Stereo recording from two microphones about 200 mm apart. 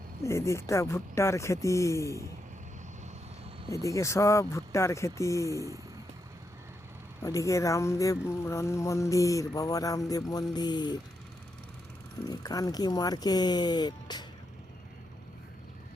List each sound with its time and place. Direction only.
0.2 s speech: 15° left (ahead or behind)
3.7 s speech: 15° left (ahead or behind)
7.2 s speech: 15° left (ahead or behind)
12.3 s speech: 20° left (ahead or behind)